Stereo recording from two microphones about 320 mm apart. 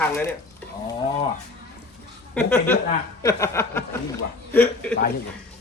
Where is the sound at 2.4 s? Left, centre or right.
Centre.